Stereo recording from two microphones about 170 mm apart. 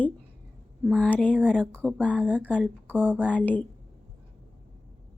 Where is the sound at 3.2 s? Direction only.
10° left (ahead or behind).